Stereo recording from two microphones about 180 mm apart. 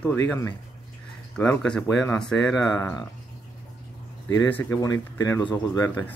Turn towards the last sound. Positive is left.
turn(degrees=20)  # may be behind; listen again after turning